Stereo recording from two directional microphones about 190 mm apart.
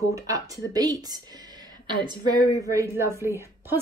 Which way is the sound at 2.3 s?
35° left (ahead or behind).